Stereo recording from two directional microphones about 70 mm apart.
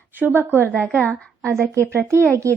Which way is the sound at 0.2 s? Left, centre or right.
Right.